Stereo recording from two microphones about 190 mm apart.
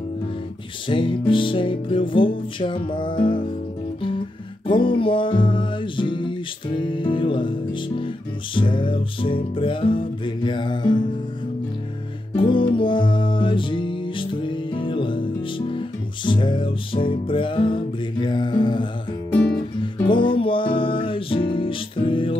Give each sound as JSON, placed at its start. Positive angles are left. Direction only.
{"t": 0.8, "sound": "music", "side_deg": 25}
{"t": 4.6, "sound": "music", "side_deg": 25}
{"t": 12.4, "sound": "music", "side_deg": 25}
{"t": 20.1, "sound": "music", "side_deg": 25}